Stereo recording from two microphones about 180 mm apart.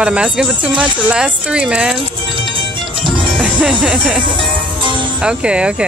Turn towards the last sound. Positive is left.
turn(degrees=-5)  # may be behind; listen again after turning